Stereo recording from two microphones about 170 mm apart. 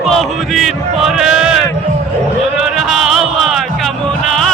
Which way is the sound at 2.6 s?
Centre (ahead or behind).